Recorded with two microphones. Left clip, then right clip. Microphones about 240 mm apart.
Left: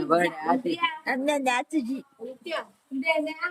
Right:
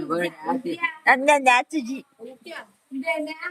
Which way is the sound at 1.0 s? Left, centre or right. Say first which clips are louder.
Right 13 dB; centre.